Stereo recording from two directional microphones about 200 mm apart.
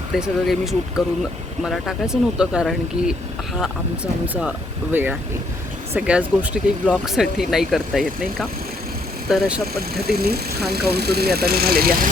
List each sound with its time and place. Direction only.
0.1 s speech: centre (ahead or behind)
9.3 s speech: centre (ahead or behind)
9.9 s speech: 50° right (ahead or behind)